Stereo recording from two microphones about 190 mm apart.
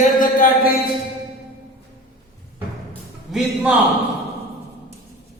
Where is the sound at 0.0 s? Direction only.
45° left (ahead or behind).